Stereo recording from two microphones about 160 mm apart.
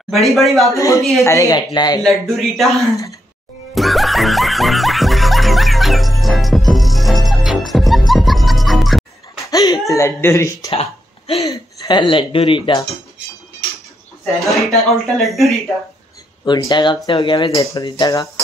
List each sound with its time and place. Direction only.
0.1 s speech: centre (ahead or behind)
0.7 s speech: 20° left (ahead or behind)
2.0 s speech: centre (ahead or behind)
3.7 s music: centre (ahead or behind)
9.5 s speech: 20° left (ahead or behind)
10.7 s a sound: 40° left (ahead or behind)
11.4 s speech: 20° left (ahead or behind)
14.2 s speech: centre (ahead or behind)
16.4 s speech: 25° left (ahead or behind)